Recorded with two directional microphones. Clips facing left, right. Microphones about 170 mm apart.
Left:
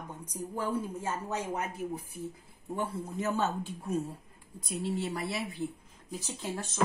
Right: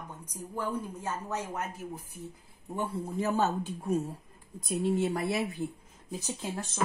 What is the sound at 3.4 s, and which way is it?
Speech, 40° right (ahead or behind).